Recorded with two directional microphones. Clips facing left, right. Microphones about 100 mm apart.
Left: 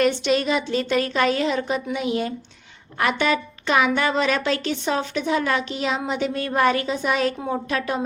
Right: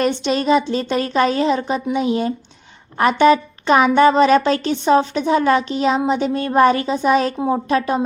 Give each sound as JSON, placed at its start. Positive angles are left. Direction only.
{"t": 0.0, "sound": "a woman's voice", "side_deg": -30}